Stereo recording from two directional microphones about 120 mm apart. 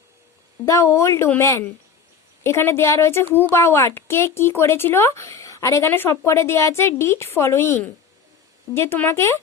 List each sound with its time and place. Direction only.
0.6 s speech: 25° left (ahead or behind)